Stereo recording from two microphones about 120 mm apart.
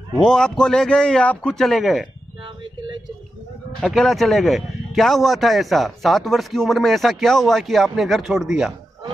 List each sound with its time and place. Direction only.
0.2 s a man's voice: 5° left (ahead or behind)
2.4 s a sound: 45° right (ahead or behind)
3.8 s a man's voice: centre (ahead or behind)